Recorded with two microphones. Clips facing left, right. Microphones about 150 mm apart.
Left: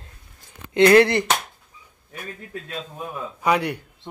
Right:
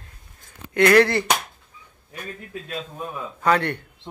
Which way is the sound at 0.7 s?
20° left (ahead or behind).